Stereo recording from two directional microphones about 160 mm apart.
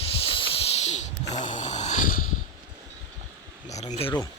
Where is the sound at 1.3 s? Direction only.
50° left (ahead or behind).